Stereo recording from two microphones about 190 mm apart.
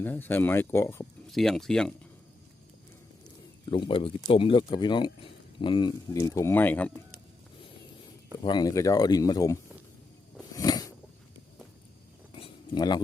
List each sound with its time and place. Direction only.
0.0 s speech: 10° left (ahead or behind)
1.3 s speech: centre (ahead or behind)
3.7 s speech: 25° left (ahead or behind); by 6.9 s 10° left (ahead or behind)
8.4 s speech: 20° left (ahead or behind)
10.4 s a sound: 20° left (ahead or behind)
12.3 s a sound: 30° left (ahead or behind)